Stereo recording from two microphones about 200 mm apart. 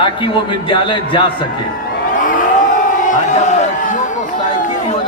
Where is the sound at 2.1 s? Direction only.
40° left (ahead or behind).